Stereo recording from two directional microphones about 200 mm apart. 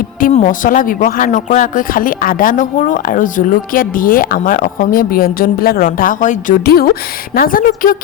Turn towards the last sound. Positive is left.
turn(degrees=45)  # may be behind; listen again after turning